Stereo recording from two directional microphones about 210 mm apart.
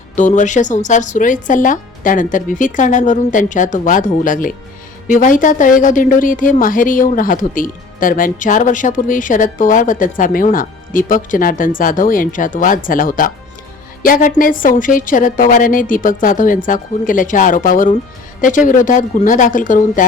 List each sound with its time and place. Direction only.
0.2 s a woman's voice: 35° left (ahead or behind)